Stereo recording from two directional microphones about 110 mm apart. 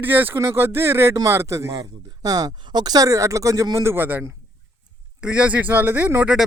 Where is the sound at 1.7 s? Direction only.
40° right (ahead or behind); by 6.3 s 20° right (ahead or behind).